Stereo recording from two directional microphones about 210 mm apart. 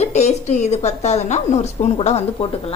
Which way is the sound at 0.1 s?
30° left (ahead or behind).